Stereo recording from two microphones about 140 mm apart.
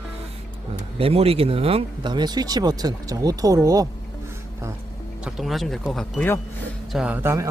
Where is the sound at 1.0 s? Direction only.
45° right (ahead or behind); by 3.9 s 25° right (ahead or behind).